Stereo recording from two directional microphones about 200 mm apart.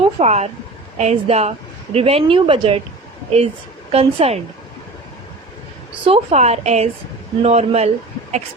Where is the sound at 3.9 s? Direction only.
30° right (ahead or behind).